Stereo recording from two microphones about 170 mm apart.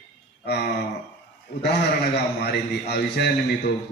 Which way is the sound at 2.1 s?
70° left (ahead or behind).